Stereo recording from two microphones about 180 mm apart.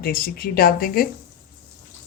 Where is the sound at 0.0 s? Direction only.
55° left (ahead or behind).